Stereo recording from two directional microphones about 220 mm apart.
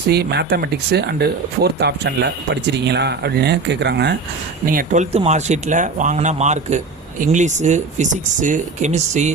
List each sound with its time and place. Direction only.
0.1 s speech: 50° right (ahead or behind)
4.6 s speech: 40° right (ahead or behind)